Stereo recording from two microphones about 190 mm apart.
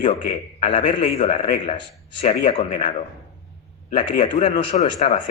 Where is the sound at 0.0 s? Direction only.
40° left (ahead or behind).